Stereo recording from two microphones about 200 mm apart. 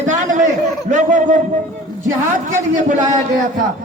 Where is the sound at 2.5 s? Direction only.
40° right (ahead or behind).